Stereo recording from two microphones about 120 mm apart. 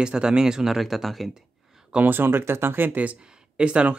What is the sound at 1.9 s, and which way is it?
Speech, 15° right (ahead or behind).